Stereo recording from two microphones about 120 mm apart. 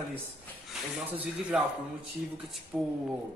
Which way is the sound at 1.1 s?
15° right (ahead or behind).